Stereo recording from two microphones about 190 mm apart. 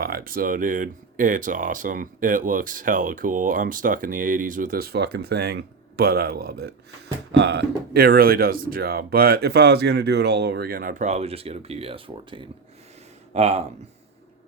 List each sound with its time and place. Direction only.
0.0 s speech: 50° right (ahead or behind); by 13.6 s 35° right (ahead or behind)